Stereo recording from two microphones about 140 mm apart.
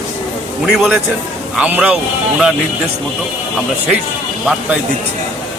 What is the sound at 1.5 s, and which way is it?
Speech, 10° right (ahead or behind).